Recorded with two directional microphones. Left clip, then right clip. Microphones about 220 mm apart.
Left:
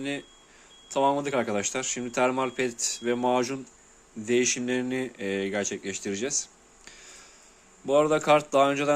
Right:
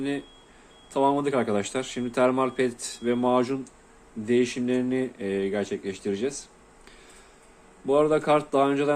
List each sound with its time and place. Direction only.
0.0 s speech: 15° left (ahead or behind)